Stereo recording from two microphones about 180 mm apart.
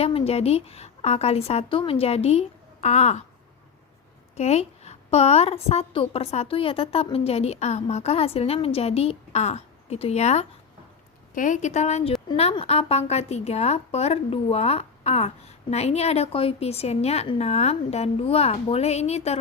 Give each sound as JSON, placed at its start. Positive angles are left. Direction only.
{"t": 0.0, "sound": "a woman's voice", "side_deg": 30}
{"t": 4.4, "sound": "a woman's voice", "side_deg": 35}